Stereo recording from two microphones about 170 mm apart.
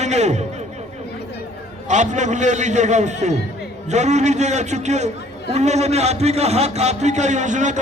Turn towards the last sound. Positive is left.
turn(degrees=-45)  # may be behind; listen again after turning